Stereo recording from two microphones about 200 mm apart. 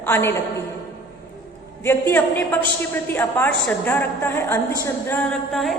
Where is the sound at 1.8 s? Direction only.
10° left (ahead or behind).